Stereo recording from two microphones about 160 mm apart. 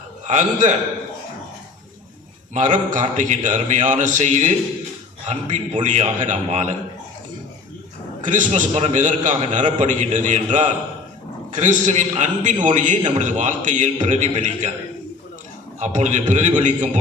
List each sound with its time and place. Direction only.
0.3 s a man's voice: 50° right (ahead or behind)
2.5 s a man's voice: 50° right (ahead or behind)
8.2 s a man's voice: 50° right (ahead or behind)
15.8 s a man's voice: 45° right (ahead or behind)